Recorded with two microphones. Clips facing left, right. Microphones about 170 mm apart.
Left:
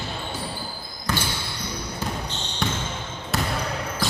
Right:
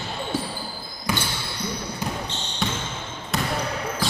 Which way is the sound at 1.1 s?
10° right (ahead or behind).